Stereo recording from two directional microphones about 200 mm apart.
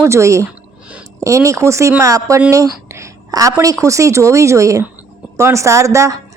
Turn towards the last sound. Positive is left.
turn(degrees=-15)  # may be behind; listen again after turning